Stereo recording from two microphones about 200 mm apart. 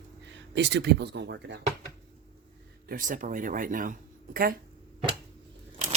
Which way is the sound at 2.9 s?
40° right (ahead or behind).